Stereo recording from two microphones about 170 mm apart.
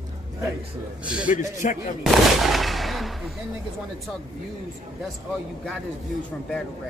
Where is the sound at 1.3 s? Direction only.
45° left (ahead or behind).